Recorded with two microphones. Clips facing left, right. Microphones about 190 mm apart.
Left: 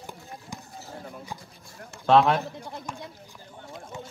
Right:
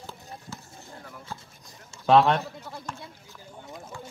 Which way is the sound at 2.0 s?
Centre (ahead or behind).